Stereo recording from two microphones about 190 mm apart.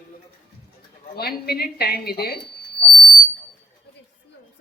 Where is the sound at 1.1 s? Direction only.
55° left (ahead or behind).